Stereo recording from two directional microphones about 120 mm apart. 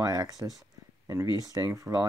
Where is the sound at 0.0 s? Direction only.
30° right (ahead or behind).